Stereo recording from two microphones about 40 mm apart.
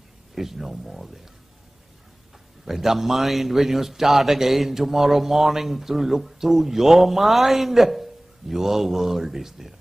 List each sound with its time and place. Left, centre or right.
0.3 s a man's voice: centre
2.6 s a man's voice: centre